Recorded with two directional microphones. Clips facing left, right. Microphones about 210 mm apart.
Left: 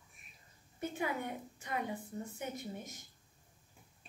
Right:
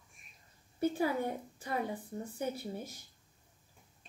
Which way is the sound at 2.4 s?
35° right (ahead or behind).